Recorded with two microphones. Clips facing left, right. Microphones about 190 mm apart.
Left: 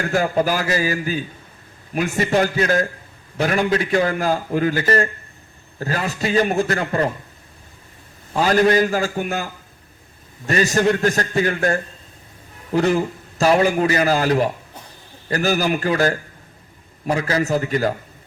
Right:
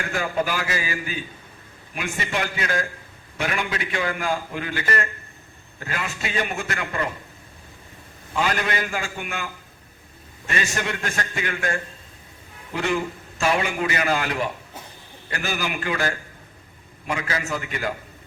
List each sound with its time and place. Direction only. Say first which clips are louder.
0.0 s a man's voice: left 6 dB; 40° left (ahead or behind)
8.3 s a man's voice: left 9 dB; 40° left (ahead or behind)